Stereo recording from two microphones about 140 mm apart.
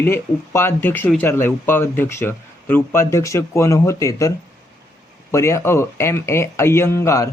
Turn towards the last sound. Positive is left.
turn(degrees=20)  # may be behind; listen again after turning